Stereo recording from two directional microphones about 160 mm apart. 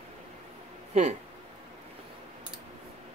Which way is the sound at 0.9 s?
45° right (ahead or behind).